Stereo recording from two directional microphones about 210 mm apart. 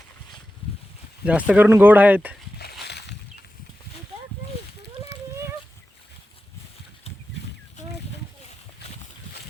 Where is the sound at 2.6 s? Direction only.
50° left (ahead or behind).